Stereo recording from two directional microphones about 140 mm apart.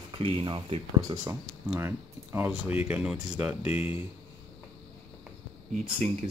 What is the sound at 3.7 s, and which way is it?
Speech, 45° left (ahead or behind).